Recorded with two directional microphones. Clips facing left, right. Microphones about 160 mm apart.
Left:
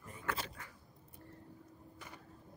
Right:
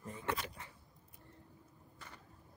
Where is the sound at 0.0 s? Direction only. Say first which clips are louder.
Right 2 dB; 25° right (ahead or behind).